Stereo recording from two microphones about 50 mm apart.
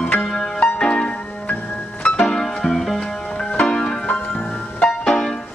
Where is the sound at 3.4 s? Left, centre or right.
Centre.